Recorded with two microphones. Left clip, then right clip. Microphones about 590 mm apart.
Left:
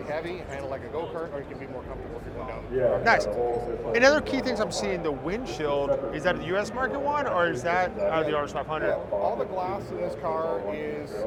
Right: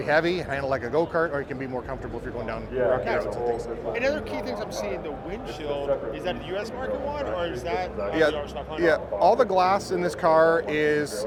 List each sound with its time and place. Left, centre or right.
0.1 s speech: right
3.0 s speech: left
8.9 s speech: right